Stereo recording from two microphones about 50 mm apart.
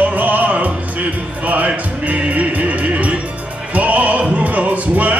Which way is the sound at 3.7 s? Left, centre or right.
Right.